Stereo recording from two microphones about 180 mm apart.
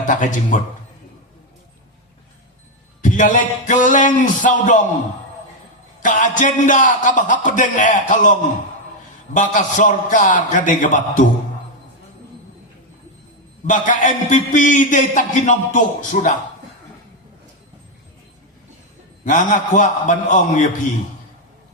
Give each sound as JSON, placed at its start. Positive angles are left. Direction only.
{"t": 0.0, "sound": "a man's voice", "side_deg": 45}
{"t": 3.0, "sound": "a man's voice", "side_deg": 45}
{"t": 6.0, "sound": "a man's voice", "side_deg": 45}
{"t": 13.7, "sound": "a man's voice", "side_deg": 45}
{"t": 19.2, "sound": "a man's voice", "side_deg": 45}